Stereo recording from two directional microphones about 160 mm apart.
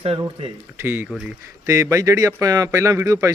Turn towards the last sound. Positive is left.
turn(degrees=-20)  # may be behind; listen again after turning